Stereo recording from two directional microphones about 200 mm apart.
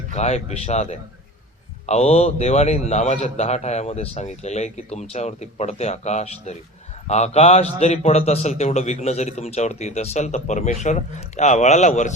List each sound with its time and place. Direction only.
0.1 s a man's voice: 35° left (ahead or behind)